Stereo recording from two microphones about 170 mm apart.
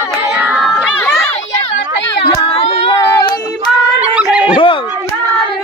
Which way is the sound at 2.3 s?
30° left (ahead or behind).